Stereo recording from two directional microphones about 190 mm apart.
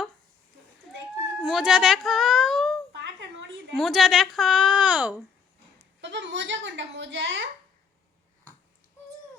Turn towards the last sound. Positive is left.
turn(degrees=-65)  # may be behind; listen again after turning